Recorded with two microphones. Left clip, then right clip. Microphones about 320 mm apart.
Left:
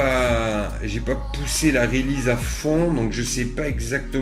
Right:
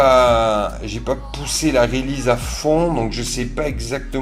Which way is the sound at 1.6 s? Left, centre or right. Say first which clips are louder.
Right 4 dB; right.